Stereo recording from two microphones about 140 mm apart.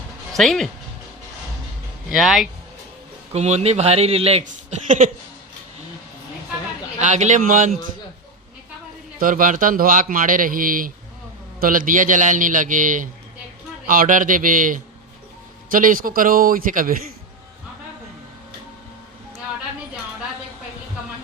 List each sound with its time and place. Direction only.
0.3 s speech: centre (ahead or behind)
2.0 s speech: centre (ahead or behind)
3.3 s speech: 50° right (ahead or behind)
4.4 s speech: 65° right (ahead or behind)
7.0 s speech: 60° right (ahead or behind)
9.1 s a man's voice: 75° right (ahead or behind)
13.8 s a man's voice: 90° right